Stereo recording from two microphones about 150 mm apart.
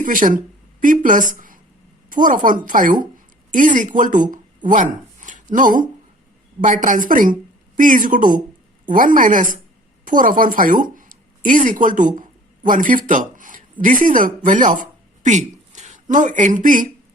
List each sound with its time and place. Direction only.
0.0 s a woman's voice: 65° right (ahead or behind)